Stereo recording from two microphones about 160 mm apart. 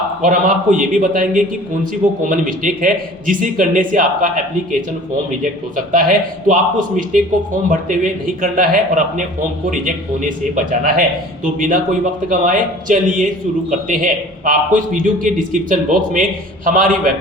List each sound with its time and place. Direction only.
0.2 s a man's voice: 55° right (ahead or behind)
5.7 s a man's voice: 55° right (ahead or behind)